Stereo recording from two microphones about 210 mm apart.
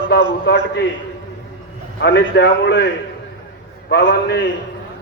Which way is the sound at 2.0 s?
50° left (ahead or behind).